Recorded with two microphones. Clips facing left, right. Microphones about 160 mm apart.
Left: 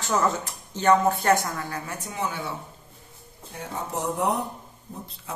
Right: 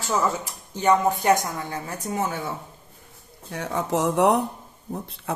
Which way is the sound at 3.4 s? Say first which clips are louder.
Right 6 dB; 80° right.